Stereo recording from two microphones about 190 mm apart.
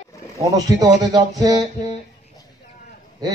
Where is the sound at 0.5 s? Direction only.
20° right (ahead or behind).